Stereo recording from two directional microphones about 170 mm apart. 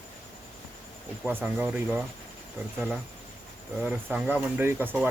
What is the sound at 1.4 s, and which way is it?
Speech, 5° right (ahead or behind).